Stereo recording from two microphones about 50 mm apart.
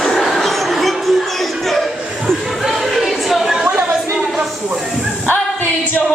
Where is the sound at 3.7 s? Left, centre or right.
Right.